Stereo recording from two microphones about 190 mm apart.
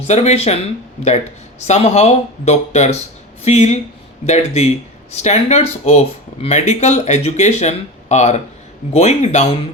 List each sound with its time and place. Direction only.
0.1 s speech: 35° left (ahead or behind)
1.6 s speech: 35° left (ahead or behind)